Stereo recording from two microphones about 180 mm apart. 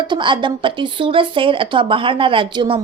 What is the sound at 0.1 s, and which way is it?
Speech, 25° right (ahead or behind).